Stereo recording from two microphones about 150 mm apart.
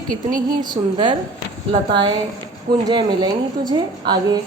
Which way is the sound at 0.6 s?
30° right (ahead or behind).